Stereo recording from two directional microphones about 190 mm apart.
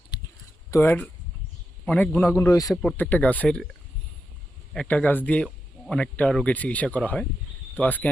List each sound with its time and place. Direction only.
0.1 s typing: 25° left (ahead or behind)
0.7 s speech: 10° left (ahead or behind)